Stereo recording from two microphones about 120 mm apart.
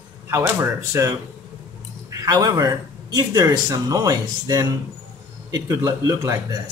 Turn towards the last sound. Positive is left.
turn(degrees=-25)  # may be behind; listen again after turning